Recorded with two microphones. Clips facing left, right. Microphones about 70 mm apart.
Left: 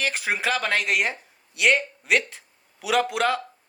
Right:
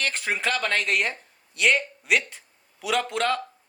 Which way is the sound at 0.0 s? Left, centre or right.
Centre.